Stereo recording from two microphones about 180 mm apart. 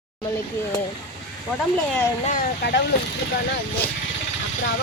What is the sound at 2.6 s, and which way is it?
Speech, 65° left (ahead or behind).